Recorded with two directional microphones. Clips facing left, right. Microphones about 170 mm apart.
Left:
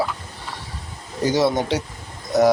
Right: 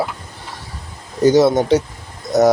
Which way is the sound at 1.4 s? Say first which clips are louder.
Right 5 dB; 45° right (ahead or behind).